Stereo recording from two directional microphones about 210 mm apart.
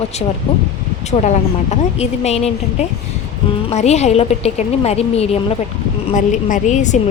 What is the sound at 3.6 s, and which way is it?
A woman's voice, 30° left (ahead or behind).